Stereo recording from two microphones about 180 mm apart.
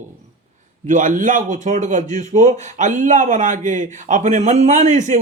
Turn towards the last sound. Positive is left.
turn(degrees=-40)  # may be behind; listen again after turning